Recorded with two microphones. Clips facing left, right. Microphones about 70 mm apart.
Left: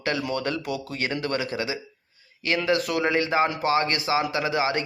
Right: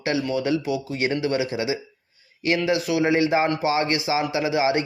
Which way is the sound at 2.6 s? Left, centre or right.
Centre.